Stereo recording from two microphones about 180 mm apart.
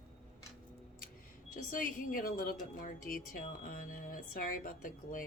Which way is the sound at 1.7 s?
50° left (ahead or behind).